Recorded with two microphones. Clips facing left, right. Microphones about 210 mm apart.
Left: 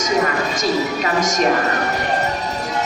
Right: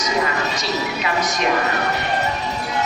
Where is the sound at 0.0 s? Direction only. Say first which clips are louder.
Left 3 dB; 45° left (ahead or behind).